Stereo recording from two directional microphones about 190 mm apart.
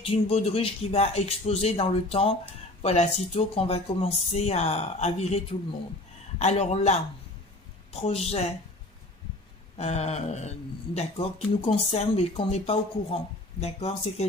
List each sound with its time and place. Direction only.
0.0 s speech: 30° left (ahead or behind)
9.8 s speech: 35° left (ahead or behind)